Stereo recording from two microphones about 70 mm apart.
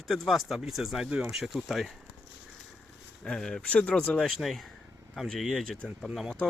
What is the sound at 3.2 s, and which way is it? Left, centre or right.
Speech, centre.